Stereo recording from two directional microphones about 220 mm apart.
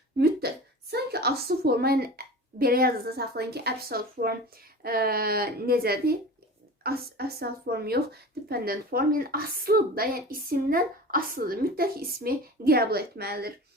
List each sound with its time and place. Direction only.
0.2 s a woman's voice: 45° right (ahead or behind)